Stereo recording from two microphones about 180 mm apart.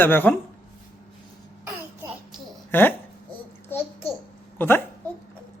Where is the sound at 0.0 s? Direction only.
10° left (ahead or behind).